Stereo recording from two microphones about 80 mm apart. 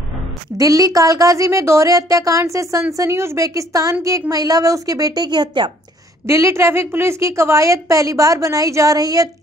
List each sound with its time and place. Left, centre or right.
0.6 s a woman's voice: right
6.2 s a woman's voice: right